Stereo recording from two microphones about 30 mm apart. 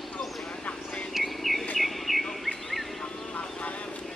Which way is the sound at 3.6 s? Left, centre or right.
Left.